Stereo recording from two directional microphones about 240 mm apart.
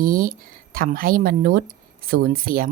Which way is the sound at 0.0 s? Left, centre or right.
Right.